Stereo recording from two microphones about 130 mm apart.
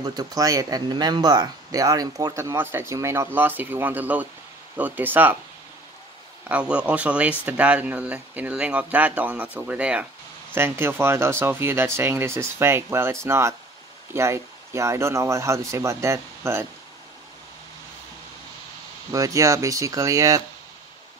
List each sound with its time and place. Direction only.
0.0 s speech: 30° right (ahead or behind); by 5.4 s 15° right (ahead or behind)
6.5 s speech: 10° right (ahead or behind)
19.1 s speech: 25° right (ahead or behind)